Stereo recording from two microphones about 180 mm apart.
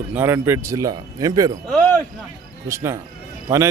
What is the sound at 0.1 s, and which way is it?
Speech, 10° right (ahead or behind).